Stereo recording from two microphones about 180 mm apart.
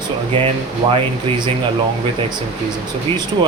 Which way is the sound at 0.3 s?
30° right (ahead or behind).